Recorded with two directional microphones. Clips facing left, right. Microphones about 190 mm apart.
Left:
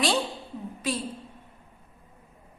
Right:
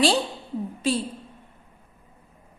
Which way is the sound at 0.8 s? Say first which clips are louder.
Right 6 dB; 30° right (ahead or behind).